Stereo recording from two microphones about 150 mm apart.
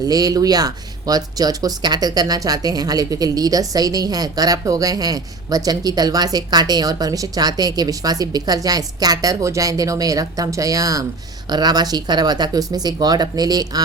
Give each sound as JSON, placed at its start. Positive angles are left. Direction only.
{"t": 0.1, "sound": "speech", "side_deg": -25}